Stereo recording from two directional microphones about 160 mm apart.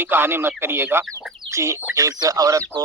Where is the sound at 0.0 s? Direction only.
15° right (ahead or behind).